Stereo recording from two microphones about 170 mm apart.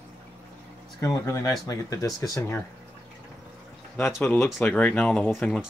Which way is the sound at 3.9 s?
15° left (ahead or behind).